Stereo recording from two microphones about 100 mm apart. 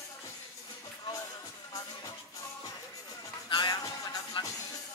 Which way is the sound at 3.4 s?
45° left (ahead or behind).